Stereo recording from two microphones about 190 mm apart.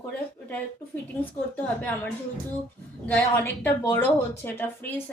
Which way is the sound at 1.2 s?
10° left (ahead or behind).